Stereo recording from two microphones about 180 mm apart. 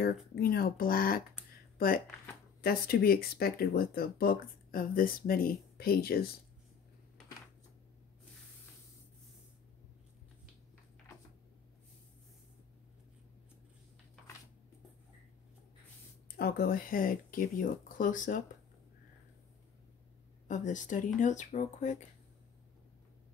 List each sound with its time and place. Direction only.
0.0 s speech: 60° left (ahead or behind)
16.3 s speech: 55° left (ahead or behind)
20.4 s speech: 45° left (ahead or behind)